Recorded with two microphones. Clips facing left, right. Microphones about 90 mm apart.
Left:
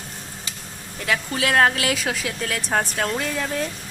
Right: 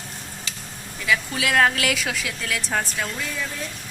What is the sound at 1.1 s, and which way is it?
A woman's voice, 35° left (ahead or behind).